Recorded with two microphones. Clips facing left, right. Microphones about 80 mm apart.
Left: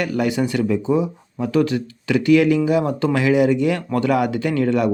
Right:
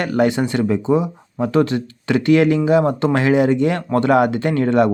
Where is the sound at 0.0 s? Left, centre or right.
Right.